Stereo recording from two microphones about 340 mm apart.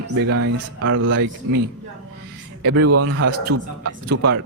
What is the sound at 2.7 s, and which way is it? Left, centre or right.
Speech, right.